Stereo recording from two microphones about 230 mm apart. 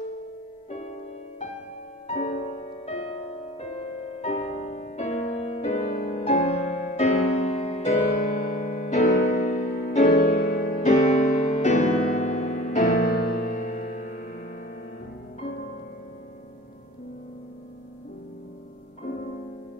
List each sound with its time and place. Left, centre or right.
0.7 s music: left
2.0 s music: left